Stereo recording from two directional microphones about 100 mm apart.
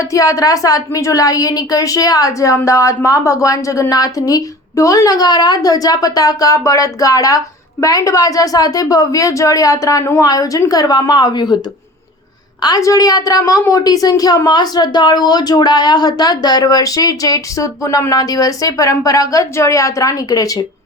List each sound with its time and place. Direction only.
0.0 s speech: 35° left (ahead or behind)
12.6 s speech: 35° left (ahead or behind)